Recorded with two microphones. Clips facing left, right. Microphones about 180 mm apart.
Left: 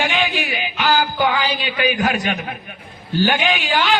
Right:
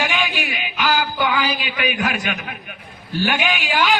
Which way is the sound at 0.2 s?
35° left (ahead or behind).